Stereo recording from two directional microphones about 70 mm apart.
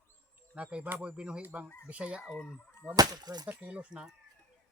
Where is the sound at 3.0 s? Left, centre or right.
Right.